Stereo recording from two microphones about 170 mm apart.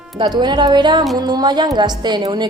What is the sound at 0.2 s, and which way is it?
A woman's voice, 25° right (ahead or behind).